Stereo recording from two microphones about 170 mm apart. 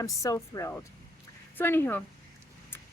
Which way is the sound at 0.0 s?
20° left (ahead or behind).